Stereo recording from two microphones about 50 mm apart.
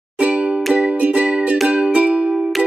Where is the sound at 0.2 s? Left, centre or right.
Right.